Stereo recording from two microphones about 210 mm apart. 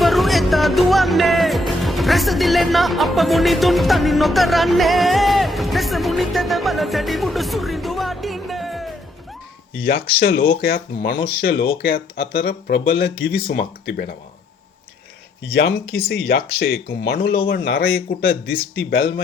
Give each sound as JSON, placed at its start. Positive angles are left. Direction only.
{"t": 0.0, "sound": "music", "side_deg": 0}
{"t": 9.7, "sound": "speech", "side_deg": 45}
{"t": 15.5, "sound": "speech", "side_deg": 50}